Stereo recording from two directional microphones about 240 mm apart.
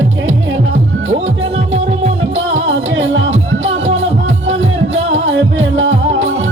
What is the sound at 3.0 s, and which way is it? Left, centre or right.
Music, right.